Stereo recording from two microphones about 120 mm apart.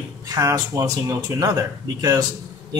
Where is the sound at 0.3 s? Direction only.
30° right (ahead or behind).